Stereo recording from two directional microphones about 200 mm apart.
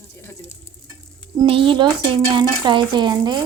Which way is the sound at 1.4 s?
25° right (ahead or behind).